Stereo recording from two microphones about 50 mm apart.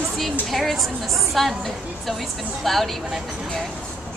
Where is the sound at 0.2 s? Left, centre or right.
Centre.